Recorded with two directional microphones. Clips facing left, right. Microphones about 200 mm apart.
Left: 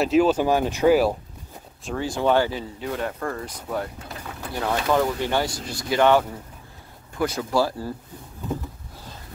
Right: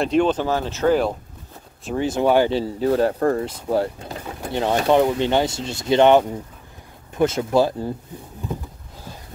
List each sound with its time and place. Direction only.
0.0 s speech: 5° left (ahead or behind)
2.0 s speech: 20° right (ahead or behind)
2.5 s speech: 35° right (ahead or behind); by 7.9 s 20° right (ahead or behind)